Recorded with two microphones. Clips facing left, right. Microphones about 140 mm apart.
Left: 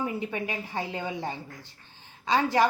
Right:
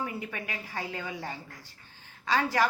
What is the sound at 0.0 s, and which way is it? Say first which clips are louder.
A woman's voice: left 5 dB; 25° left (ahead or behind).